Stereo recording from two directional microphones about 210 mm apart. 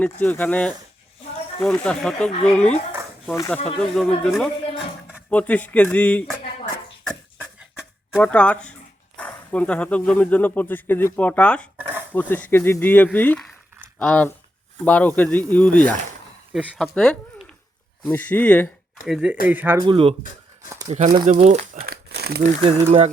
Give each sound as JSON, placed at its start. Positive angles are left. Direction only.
{"t": 0.0, "sound": "speech", "side_deg": 10}
{"t": 8.1, "sound": "speech", "side_deg": 5}
{"t": 19.0, "sound": "speech", "side_deg": -5}
{"t": 19.8, "sound": "speech", "side_deg": -25}
{"t": 21.8, "sound": "crumpling", "side_deg": -50}
{"t": 22.6, "sound": "speech", "side_deg": -25}